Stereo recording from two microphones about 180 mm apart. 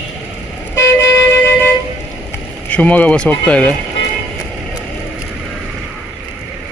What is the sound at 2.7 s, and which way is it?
Speech, 10° left (ahead or behind).